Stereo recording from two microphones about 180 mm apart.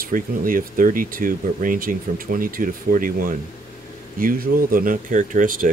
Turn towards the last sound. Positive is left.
turn(degrees=-50)  # may be behind; listen again after turning